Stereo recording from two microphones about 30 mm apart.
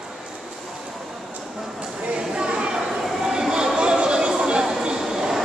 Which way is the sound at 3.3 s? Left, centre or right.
Right.